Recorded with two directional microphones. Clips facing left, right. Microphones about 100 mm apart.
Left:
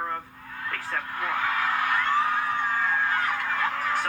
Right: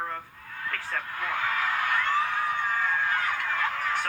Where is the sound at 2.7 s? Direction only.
5° left (ahead or behind).